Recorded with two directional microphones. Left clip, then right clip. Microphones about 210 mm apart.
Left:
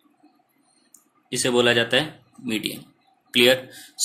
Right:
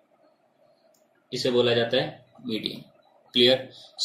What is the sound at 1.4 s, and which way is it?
Speech, 70° left (ahead or behind).